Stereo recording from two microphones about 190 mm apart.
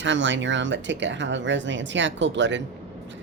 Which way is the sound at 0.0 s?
70° right (ahead or behind).